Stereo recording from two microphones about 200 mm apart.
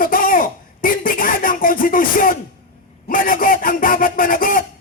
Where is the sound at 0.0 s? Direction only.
45° left (ahead or behind).